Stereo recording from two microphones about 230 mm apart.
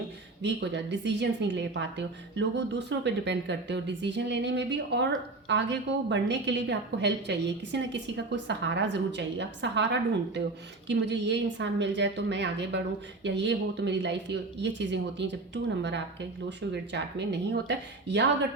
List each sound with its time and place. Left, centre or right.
0.4 s a woman's voice: right